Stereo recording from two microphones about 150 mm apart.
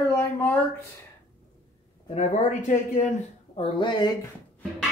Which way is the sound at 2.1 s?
55° left (ahead or behind).